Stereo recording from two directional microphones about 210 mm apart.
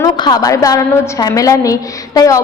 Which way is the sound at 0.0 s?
20° left (ahead or behind).